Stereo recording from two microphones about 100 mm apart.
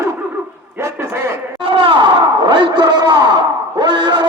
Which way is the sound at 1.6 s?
60° right (ahead or behind).